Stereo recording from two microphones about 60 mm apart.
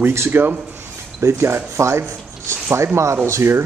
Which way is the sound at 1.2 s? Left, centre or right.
Right.